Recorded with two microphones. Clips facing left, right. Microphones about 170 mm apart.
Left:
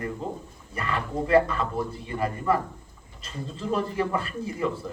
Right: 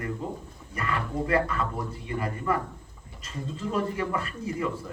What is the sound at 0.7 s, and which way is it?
A man's voice, 30° left (ahead or behind).